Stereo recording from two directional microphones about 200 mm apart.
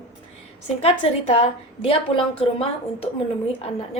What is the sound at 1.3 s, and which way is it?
A woman's voice, 30° left (ahead or behind).